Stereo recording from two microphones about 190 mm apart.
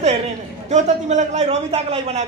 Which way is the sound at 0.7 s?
35° right (ahead or behind).